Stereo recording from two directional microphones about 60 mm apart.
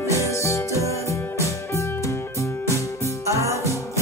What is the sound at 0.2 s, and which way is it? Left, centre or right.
Music, left.